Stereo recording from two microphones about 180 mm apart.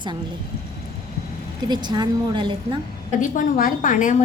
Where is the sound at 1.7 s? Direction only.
25° right (ahead or behind).